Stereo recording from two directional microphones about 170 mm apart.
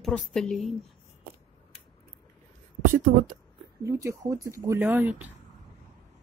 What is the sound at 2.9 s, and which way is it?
Speech, 50° right (ahead or behind).